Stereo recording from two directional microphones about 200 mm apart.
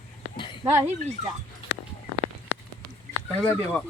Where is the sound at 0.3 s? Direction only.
25° left (ahead or behind).